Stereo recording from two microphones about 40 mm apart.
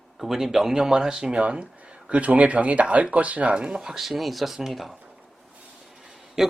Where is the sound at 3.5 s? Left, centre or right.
Right.